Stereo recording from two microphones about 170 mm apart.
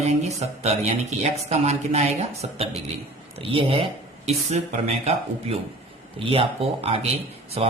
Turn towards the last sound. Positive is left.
turn(degrees=-35)  # may be behind; listen again after turning